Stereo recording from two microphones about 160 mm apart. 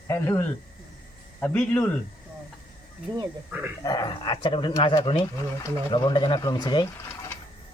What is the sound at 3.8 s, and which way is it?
Speech, 25° left (ahead or behind).